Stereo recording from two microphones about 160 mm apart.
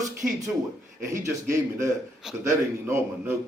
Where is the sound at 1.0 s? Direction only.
20° right (ahead or behind).